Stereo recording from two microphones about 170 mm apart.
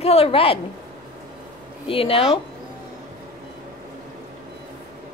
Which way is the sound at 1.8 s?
35° left (ahead or behind).